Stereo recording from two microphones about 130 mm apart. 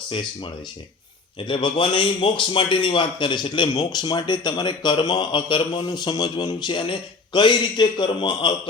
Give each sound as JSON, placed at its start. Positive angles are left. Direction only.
{"t": 0.1, "sound": "a man's voice", "side_deg": 35}